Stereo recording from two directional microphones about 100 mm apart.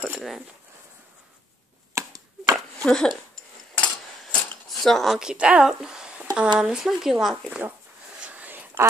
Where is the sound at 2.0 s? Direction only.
30° right (ahead or behind).